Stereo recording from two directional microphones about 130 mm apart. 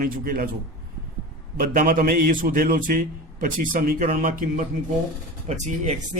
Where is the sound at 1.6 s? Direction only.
90° right.